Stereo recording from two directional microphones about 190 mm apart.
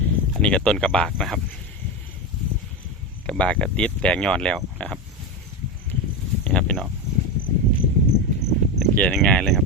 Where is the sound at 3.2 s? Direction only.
5° left (ahead or behind).